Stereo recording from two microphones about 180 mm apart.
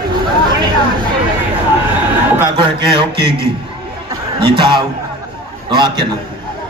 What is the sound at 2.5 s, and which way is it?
Speech, 25° right (ahead or behind).